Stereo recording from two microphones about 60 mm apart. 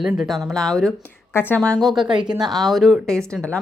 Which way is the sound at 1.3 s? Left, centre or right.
Left.